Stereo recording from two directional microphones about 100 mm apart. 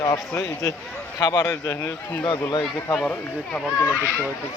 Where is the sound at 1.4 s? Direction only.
25° left (ahead or behind).